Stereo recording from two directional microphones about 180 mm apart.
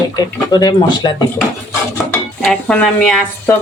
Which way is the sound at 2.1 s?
5° left (ahead or behind).